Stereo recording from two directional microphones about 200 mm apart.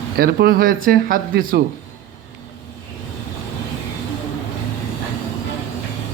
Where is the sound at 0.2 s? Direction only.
50° right (ahead or behind).